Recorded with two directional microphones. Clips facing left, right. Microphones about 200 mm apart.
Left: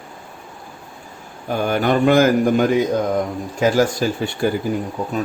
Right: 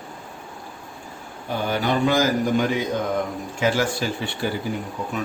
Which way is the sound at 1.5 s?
50° left (ahead or behind).